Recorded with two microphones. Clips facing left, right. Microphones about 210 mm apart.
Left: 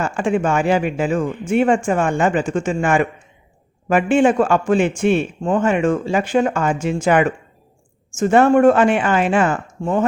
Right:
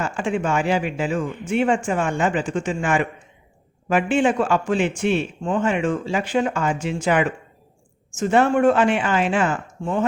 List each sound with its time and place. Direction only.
0.0 s a man's voice: 50° left (ahead or behind)